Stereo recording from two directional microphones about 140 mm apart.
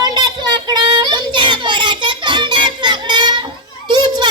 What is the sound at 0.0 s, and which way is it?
Child singing, 30° right (ahead or behind).